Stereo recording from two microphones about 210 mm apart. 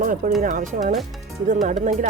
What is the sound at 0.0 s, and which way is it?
Speech, 40° right (ahead or behind).